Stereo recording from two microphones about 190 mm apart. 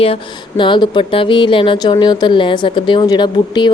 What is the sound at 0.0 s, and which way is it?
Speech, 30° left (ahead or behind).